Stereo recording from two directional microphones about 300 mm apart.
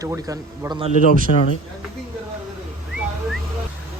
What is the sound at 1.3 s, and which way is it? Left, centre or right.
Speech, left.